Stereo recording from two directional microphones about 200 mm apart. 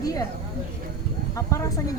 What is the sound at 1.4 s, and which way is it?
Speech, 15° left (ahead or behind).